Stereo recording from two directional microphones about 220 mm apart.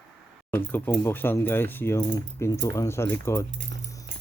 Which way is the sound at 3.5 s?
55° right (ahead or behind).